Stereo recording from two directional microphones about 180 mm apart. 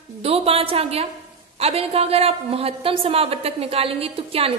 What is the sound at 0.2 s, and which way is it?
A woman's voice, 35° right (ahead or behind).